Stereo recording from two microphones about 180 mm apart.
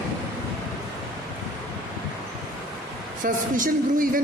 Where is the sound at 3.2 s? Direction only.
50° right (ahead or behind).